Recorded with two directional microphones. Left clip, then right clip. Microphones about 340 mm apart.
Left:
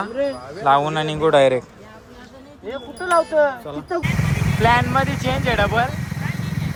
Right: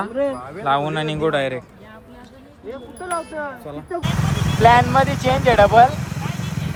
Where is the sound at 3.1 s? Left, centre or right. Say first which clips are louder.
Left 10 dB; left.